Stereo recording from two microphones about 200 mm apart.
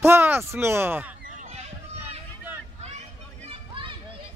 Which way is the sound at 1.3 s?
35° right (ahead or behind).